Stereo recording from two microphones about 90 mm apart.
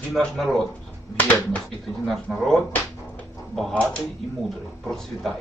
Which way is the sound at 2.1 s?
5° left (ahead or behind).